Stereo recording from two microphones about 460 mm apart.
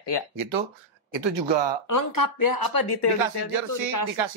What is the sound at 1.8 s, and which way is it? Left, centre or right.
Speech, left.